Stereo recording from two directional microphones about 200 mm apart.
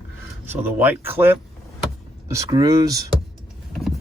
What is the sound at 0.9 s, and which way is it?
Speech, 10° right (ahead or behind).